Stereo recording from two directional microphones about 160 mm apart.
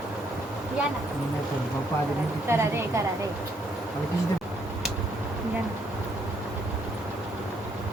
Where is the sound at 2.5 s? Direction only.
15° right (ahead or behind).